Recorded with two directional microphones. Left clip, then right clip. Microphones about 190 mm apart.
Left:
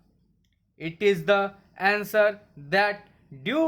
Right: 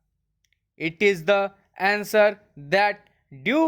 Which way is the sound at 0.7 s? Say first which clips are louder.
Right 2 dB; 35° right (ahead or behind).